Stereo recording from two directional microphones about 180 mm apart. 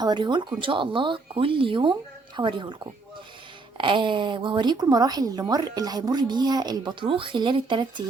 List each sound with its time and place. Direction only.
0.0 s a woman's voice: 25° right (ahead or behind)